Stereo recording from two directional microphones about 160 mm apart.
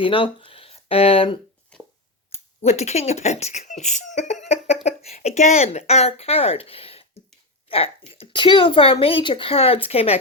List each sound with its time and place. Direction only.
0.0 s speech: 30° left (ahead or behind)
1.7 s a sound: 5° left (ahead or behind)
2.3 s speech: 45° left (ahead or behind)